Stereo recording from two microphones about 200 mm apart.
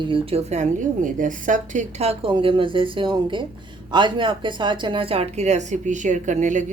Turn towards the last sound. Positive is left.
turn(degrees=-40)  # may be behind; listen again after turning